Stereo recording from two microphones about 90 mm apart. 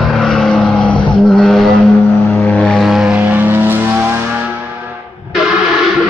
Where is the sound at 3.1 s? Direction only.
20° right (ahead or behind).